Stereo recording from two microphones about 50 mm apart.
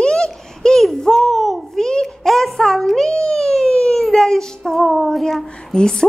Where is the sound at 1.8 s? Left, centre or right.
Centre.